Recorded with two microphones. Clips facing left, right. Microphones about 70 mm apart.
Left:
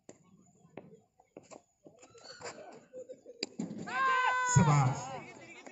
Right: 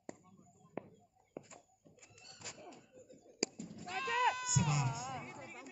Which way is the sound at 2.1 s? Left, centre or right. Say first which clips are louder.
Left 9 dB; left.